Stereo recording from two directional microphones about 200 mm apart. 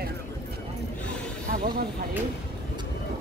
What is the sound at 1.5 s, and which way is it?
Hiss, 50° right (ahead or behind).